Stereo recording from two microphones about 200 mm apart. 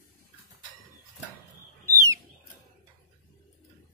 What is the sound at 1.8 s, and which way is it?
Bird, 15° right (ahead or behind).